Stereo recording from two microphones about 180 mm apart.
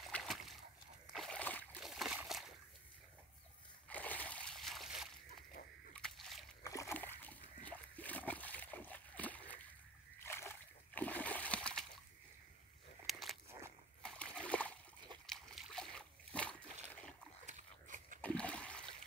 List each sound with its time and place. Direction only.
0.1 s boat: centre (ahead or behind)
1.1 s splash: 5° left (ahead or behind)
1.8 s splash: centre (ahead or behind)
3.9 s splash: 10° left (ahead or behind)
5.9 s a sound: centre (ahead or behind)
6.6 s splash: 15° left (ahead or behind)
13.0 s a sound: centre (ahead or behind)
14.0 s splash: 5° left (ahead or behind)
17.5 s dog: 45° right (ahead or behind)
18.2 s splash: 5° left (ahead or behind)